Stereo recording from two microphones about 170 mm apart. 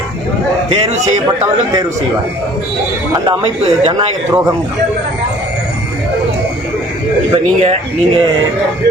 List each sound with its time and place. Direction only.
3.2 s speech: 35° right (ahead or behind)
7.3 s speech: 35° right (ahead or behind)